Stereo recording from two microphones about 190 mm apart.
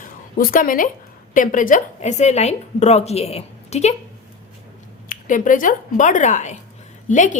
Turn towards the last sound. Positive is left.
turn(degrees=40)  # may be behind; listen again after turning